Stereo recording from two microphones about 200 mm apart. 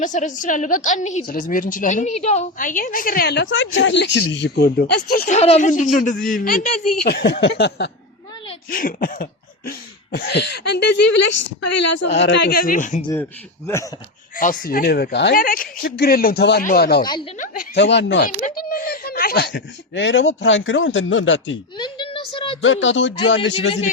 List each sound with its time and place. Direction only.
0.0 s a man's voice: 40° left (ahead or behind)
5.4 s a man's voice: 35° left (ahead or behind); by 7.9 s 55° left (ahead or behind)
8.7 s a woman's voice: 45° left (ahead or behind)
14.6 s a woman's voice: 45° left (ahead or behind)
17.7 s speech: 60° left (ahead or behind)
18.3 s speech: 40° left (ahead or behind); by 21.6 s 70° left (ahead or behind)
21.8 s a woman's voice: 20° left (ahead or behind)
22.6 s speech: 70° left (ahead or behind)